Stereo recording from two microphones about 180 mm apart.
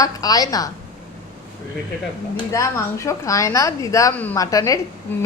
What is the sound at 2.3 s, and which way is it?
A woman's voice, 15° left (ahead or behind).